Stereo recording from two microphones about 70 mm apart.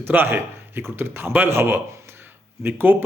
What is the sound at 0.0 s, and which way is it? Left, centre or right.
Speech, right.